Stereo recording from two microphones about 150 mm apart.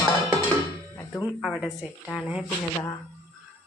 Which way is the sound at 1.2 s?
5° right (ahead or behind).